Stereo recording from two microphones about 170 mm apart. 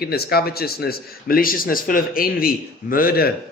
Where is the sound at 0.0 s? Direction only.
65° left (ahead or behind).